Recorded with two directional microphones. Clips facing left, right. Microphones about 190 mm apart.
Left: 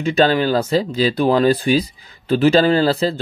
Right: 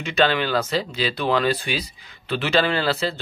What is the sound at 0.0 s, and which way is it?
A man's voice, 40° left (ahead or behind).